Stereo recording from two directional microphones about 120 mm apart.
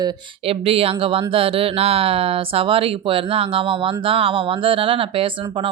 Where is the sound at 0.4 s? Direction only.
55° right (ahead or behind).